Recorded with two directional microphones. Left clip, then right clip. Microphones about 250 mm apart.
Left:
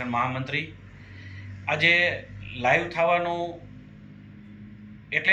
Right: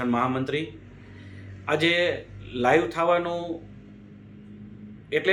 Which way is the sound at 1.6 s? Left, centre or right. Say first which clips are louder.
Left 2 dB; centre.